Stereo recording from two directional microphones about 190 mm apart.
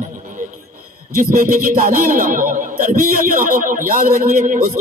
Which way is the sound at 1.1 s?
45° right (ahead or behind).